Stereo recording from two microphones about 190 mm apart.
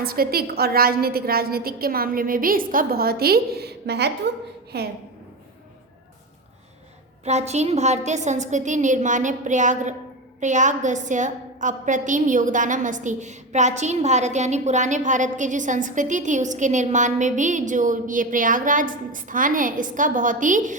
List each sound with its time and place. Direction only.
0.0 s a woman's voice: 50° right (ahead or behind)
7.3 s a woman's voice: 35° right (ahead or behind)